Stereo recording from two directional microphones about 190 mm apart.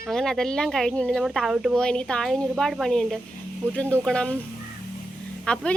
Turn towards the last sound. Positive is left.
turn(degrees=5)  # may be behind; listen again after turning